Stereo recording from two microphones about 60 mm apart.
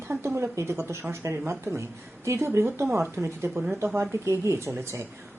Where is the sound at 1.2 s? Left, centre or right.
Right.